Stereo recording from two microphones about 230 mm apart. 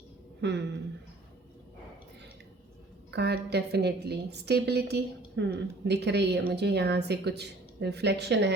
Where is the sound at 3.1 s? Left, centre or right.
Right.